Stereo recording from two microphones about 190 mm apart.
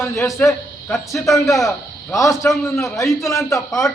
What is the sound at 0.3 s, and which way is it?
A man's voice, 15° left (ahead or behind).